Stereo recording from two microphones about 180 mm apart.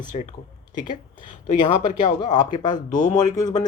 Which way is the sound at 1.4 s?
45° left (ahead or behind).